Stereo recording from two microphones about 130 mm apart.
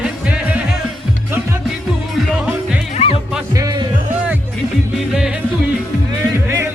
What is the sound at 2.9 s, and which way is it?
Music, 50° left (ahead or behind).